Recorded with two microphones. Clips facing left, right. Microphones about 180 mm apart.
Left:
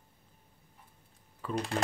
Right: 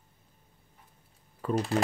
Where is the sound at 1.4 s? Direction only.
45° right (ahead or behind).